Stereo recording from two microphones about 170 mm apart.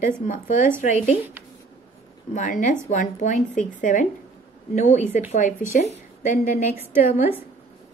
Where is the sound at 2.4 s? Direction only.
50° left (ahead or behind).